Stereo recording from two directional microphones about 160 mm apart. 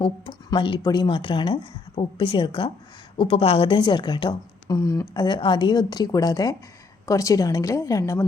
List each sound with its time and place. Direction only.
0.0 s a woman's voice: 30° left (ahead or behind)